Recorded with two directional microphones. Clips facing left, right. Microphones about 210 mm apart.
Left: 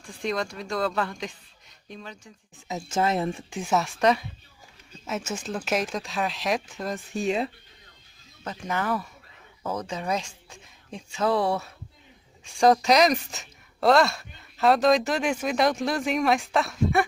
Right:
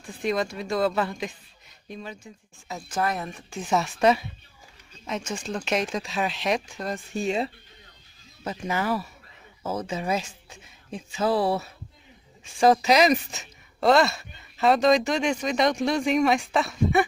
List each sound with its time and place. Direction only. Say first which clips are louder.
0.0 s speech: right 3 dB; 5° right (ahead or behind)
2.7 s speech: left 3 dB; 25° left (ahead or behind)
3.5 s speech: right 2 dB; 5° left (ahead or behind)
5.0 s speech: even; 5° left (ahead or behind)